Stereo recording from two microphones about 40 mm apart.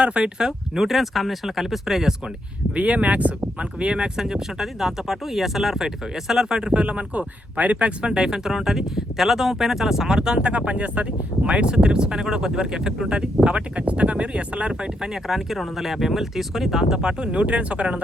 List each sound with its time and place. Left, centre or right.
0.0 s speech: right
0.4 s speech: centre
2.7 s speech: right
3.4 s speech: right
4.2 s speech: centre
10.7 s speech: right
11.4 s speech: right
14.7 s speech: centre
17.0 s speech: right